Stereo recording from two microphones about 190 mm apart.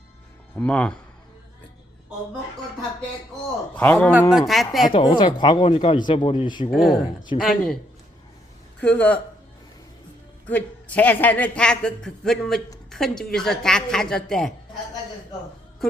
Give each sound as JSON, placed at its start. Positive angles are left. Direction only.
{"t": 0.5, "sound": "speech", "side_deg": 5}
{"t": 3.8, "sound": "a woman's voice", "side_deg": 10}
{"t": 4.9, "sound": "speech", "side_deg": 25}
{"t": 6.7, "sound": "a woman's voice", "side_deg": 0}
{"t": 8.8, "sound": "speech", "side_deg": 5}
{"t": 10.4, "sound": "a woman's voice", "side_deg": 10}